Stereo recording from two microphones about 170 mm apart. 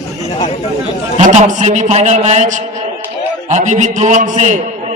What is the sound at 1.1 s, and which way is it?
A man's voice, 45° right (ahead or behind).